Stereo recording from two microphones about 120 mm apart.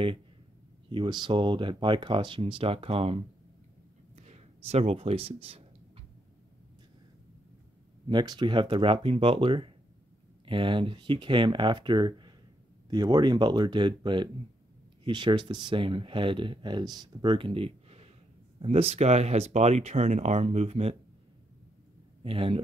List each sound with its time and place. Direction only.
0.8 s speech: 40° right (ahead or behind)
4.2 s a sound: 65° right (ahead or behind)
8.1 s speech: 40° right (ahead or behind); by 20.9 s 60° right (ahead or behind)
22.2 s speech: 50° right (ahead or behind)